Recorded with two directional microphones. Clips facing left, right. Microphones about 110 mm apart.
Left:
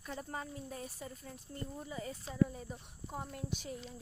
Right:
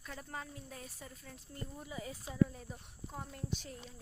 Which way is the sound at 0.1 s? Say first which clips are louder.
Left 4 dB; 15° left (ahead or behind).